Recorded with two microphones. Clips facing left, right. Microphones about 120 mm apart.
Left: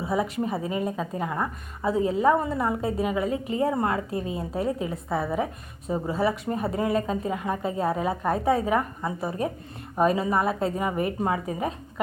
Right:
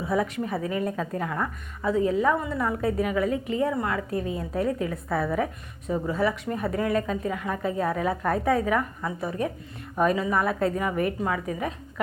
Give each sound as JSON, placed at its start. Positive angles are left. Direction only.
{"t": 0.0, "sound": "a woman's voice", "side_deg": 25}